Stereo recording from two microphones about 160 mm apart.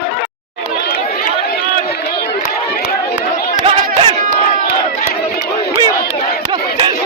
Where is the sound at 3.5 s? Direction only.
35° right (ahead or behind).